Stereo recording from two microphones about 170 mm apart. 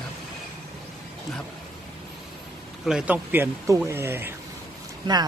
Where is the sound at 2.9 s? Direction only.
5° right (ahead or behind).